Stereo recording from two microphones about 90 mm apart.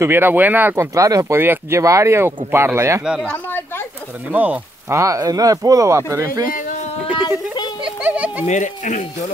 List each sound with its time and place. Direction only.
0.0 s speech: 25° right (ahead or behind)
0.7 s speech: 35° right (ahead or behind)
1.4 s speech: 25° right (ahead or behind)
1.8 s speech: 35° right (ahead or behind)
3.3 s speech: 25° left (ahead or behind)
4.3 s speech: 20° right (ahead or behind)
4.8 s speech: 35° right (ahead or behind)
7.2 s a sound: 55° left (ahead or behind)
8.0 s a sound: 15° right (ahead or behind)